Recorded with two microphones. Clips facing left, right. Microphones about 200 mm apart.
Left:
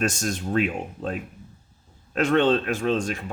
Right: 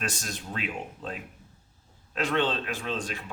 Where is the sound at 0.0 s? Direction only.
45° left (ahead or behind).